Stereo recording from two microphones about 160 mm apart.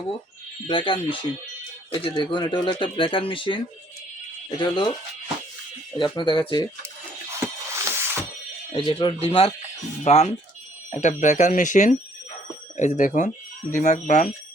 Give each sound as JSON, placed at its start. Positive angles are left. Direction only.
{"t": 0.7, "sound": "speech", "side_deg": 30}
{"t": 6.0, "sound": "speech", "side_deg": 30}
{"t": 7.3, "sound": "music", "side_deg": -15}
{"t": 8.7, "sound": "speech", "side_deg": 30}